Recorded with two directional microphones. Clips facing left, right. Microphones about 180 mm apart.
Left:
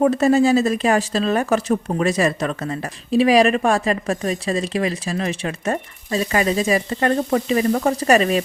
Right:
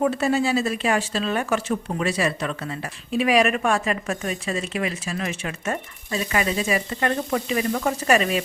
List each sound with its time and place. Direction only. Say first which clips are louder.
0.0 s speech: left 6 dB; 40° left (ahead or behind)